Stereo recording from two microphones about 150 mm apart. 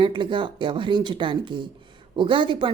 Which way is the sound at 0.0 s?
30° right (ahead or behind).